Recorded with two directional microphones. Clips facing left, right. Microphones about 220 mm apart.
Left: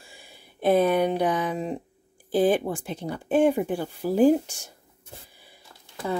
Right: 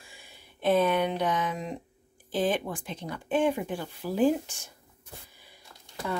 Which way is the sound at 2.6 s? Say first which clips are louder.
Left 6 dB; 40° left (ahead or behind).